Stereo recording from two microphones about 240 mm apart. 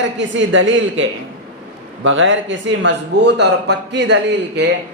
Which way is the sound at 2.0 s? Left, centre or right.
Right.